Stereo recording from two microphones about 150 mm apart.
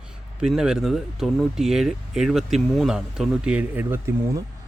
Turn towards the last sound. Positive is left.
turn(degrees=-15)  # may be behind; listen again after turning